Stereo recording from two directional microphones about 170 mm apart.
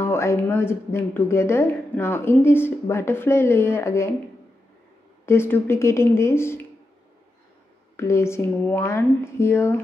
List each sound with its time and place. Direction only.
0.0 s speech: 15° left (ahead or behind)
5.2 s speech: 15° left (ahead or behind)
7.9 s speech: 15° left (ahead or behind)